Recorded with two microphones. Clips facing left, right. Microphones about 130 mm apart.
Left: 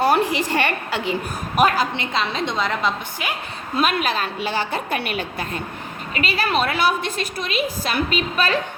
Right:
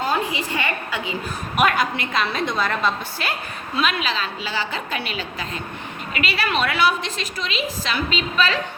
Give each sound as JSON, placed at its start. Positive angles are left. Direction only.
{"t": 0.0, "sound": "a woman's voice", "side_deg": 75}
{"t": 1.5, "sound": "a woman's voice", "side_deg": 35}
{"t": 3.8, "sound": "a woman's voice", "side_deg": 50}
{"t": 6.1, "sound": "a woman's voice", "side_deg": 40}